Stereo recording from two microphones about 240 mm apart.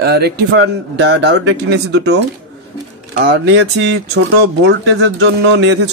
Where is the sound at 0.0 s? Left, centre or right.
Right.